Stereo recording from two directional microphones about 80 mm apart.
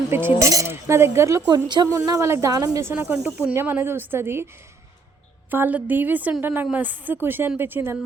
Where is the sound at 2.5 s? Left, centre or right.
Right.